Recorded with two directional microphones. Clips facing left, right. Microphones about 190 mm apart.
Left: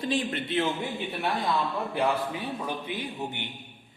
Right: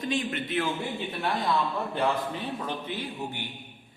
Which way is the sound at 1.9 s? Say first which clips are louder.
Left 1 dB; 10° left (ahead or behind).